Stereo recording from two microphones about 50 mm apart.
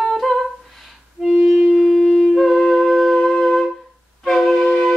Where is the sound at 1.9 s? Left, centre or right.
Centre.